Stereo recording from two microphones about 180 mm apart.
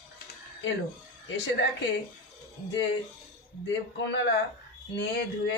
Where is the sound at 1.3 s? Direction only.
75° left (ahead or behind).